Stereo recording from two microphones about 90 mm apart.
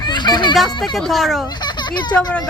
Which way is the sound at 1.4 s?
50° left (ahead or behind).